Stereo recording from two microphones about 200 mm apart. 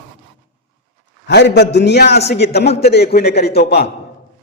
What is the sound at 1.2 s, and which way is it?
A man's voice, 60° left (ahead or behind).